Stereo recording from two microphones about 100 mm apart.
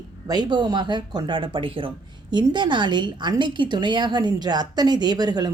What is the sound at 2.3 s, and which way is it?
A woman's voice, 50° right (ahead or behind).